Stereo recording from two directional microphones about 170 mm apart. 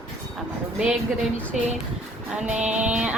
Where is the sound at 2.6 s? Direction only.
5° right (ahead or behind).